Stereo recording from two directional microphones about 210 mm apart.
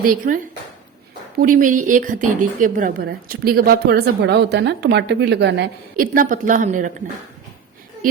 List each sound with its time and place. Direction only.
0.0 s a woman's voice: 40° right (ahead or behind)
1.4 s a woman's voice: 40° right (ahead or behind); by 6.1 s 55° right (ahead or behind)
6.1 s a woman's voice: 40° right (ahead or behind)